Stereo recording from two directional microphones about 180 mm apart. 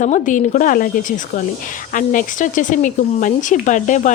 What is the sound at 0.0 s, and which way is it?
Speech, 45° left (ahead or behind).